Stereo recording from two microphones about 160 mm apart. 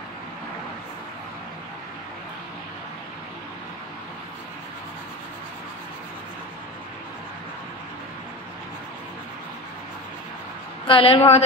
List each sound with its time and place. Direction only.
10.9 s a woman's voice: 35° left (ahead or behind)